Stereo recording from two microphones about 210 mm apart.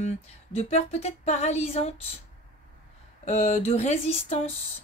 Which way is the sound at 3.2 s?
30° left (ahead or behind).